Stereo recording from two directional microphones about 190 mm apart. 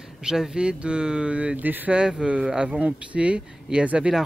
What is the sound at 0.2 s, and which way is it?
Speech, 5° right (ahead or behind).